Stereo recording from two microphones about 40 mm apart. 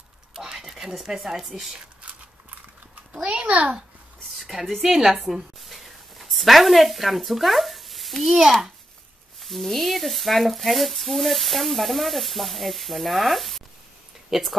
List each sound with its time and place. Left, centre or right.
0.3 s a sound: centre
3.1 s a child's voice: right
4.5 s a woman's voice: centre
5.3 s a sound: centre
6.3 s speech: centre
9.4 s speech: centre